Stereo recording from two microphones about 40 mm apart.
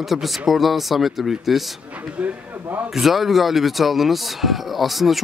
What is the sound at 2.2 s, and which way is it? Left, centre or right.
Speech, right.